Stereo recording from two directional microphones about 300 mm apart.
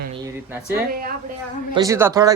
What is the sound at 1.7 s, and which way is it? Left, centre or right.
Speech, centre.